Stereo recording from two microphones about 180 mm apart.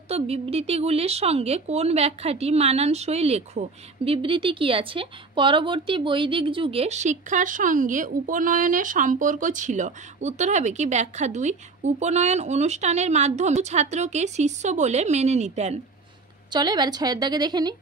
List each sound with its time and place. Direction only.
0.1 s speech: 35° right (ahead or behind)
16.4 s a woman's voice: 25° right (ahead or behind)